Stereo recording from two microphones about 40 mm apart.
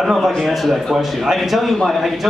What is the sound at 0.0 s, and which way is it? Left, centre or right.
Speech, centre.